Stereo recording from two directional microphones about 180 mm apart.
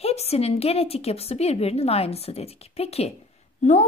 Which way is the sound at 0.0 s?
35° left (ahead or behind).